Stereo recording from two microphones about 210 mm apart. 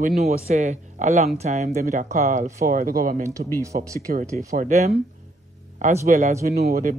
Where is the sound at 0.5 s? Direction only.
35° right (ahead or behind).